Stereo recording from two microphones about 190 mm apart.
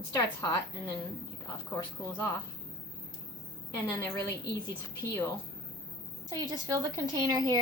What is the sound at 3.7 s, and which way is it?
Speech, 15° left (ahead or behind).